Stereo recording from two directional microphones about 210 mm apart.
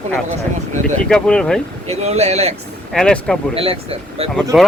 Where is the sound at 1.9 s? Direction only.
30° right (ahead or behind).